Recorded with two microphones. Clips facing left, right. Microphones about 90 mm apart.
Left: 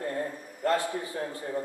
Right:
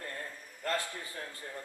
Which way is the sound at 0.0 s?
30° left (ahead or behind).